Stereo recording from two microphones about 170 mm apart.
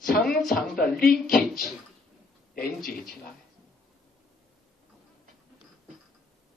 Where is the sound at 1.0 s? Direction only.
60° left (ahead or behind).